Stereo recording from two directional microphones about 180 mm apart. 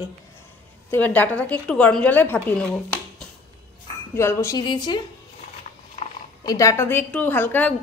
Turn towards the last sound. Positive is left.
turn(degrees=10)  # may be behind; listen again after turning